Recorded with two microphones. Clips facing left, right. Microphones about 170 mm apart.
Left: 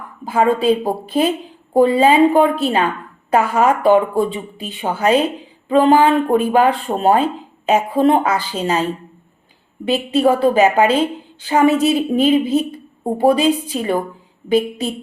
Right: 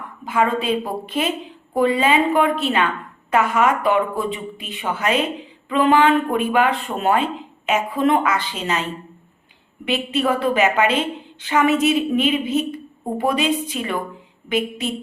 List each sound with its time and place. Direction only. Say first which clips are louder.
0.3 s speech: left 5 dB; 35° left (ahead or behind)